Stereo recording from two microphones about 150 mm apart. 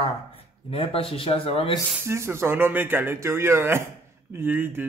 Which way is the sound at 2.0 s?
15° right (ahead or behind).